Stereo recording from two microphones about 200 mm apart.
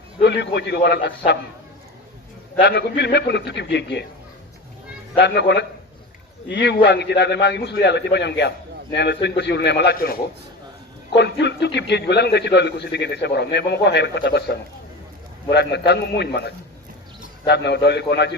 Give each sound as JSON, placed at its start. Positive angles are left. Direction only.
{"t": 0.2, "sound": "a man's voice", "side_deg": 60}
{"t": 2.6, "sound": "a man's voice", "side_deg": 55}
{"t": 5.2, "sound": "a man's voice", "side_deg": 60}
{"t": 17.4, "sound": "a man's voice", "side_deg": 55}